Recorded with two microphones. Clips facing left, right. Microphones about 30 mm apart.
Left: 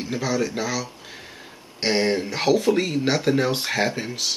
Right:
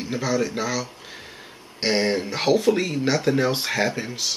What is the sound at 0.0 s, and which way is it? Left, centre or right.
Speech, centre.